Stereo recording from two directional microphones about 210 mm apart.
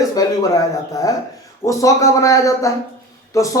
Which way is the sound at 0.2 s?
15° left (ahead or behind).